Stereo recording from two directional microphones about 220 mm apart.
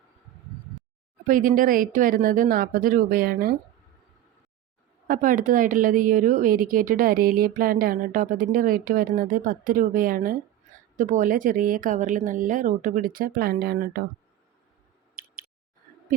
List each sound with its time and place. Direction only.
1.3 s a woman's voice: 35° right (ahead or behind)
5.0 s a woman's voice: 40° right (ahead or behind)
15.2 s a sound: 40° right (ahead or behind)